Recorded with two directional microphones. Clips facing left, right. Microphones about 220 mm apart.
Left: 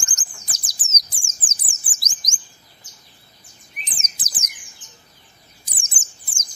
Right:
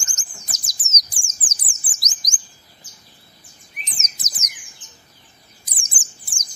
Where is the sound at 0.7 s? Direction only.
30° left (ahead or behind).